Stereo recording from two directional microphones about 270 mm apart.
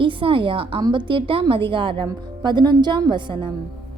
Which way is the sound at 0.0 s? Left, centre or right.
Centre.